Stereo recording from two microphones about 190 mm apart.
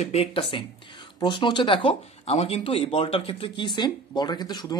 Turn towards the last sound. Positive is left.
turn(degrees=20)  # may be behind; listen again after turning